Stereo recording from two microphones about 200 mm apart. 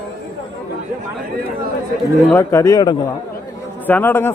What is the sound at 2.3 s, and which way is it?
A man's voice, 15° left (ahead or behind).